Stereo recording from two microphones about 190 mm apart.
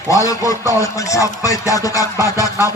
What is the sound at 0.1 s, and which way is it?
Speech, 15° left (ahead or behind).